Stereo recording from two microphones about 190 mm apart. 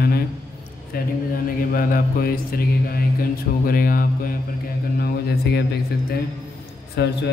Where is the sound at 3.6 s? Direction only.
50° left (ahead or behind).